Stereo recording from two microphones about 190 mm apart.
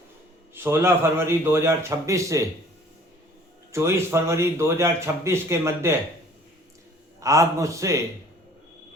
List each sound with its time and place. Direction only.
0.5 s a man's voice: 10° right (ahead or behind)
3.7 s a man's voice: 15° right (ahead or behind)
7.2 s a man's voice: 15° right (ahead or behind)